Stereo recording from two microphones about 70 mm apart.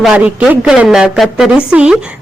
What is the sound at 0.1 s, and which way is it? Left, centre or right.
A woman's voice, centre.